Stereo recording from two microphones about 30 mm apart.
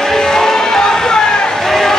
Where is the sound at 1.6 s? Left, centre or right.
Centre.